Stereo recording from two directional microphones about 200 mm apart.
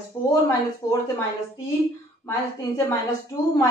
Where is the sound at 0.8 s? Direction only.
15° left (ahead or behind).